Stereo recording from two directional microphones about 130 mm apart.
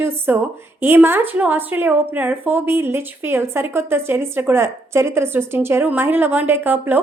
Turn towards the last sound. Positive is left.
turn(degrees=-15)  # may be behind; listen again after turning